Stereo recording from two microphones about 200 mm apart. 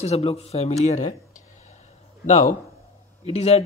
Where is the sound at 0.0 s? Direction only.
30° left (ahead or behind).